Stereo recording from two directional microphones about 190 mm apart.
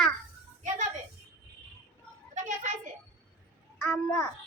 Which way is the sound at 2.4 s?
40° right (ahead or behind).